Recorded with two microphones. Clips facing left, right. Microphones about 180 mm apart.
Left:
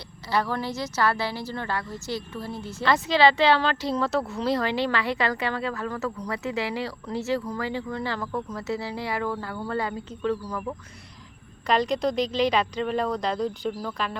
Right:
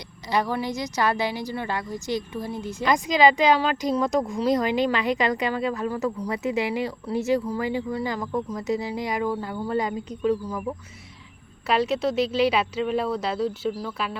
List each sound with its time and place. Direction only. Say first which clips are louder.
0.3 s a woman's voice: right 2 dB; 15° right (ahead or behind)